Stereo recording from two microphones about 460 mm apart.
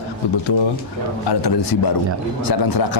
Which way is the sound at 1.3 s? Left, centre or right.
Left.